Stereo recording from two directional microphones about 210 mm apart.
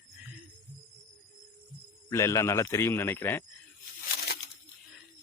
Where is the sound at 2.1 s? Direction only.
15° left (ahead or behind).